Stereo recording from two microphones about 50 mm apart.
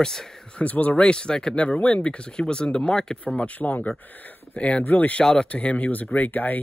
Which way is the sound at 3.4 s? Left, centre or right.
Left.